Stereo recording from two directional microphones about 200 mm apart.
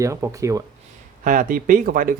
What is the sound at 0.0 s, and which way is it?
Speech, 15° right (ahead or behind).